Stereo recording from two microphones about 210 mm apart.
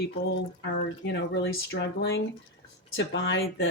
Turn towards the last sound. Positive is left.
turn(degrees=55)  # may be behind; listen again after turning